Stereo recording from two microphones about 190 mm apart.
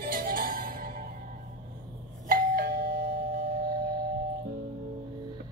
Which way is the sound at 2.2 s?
50° right (ahead or behind).